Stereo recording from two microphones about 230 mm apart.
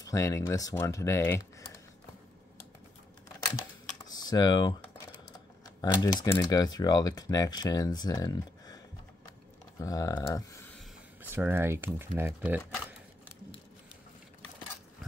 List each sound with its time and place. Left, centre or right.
0.0 s speech: centre
4.1 s speech: centre
5.8 s speech: centre
9.8 s speech: centre
11.3 s speech: centre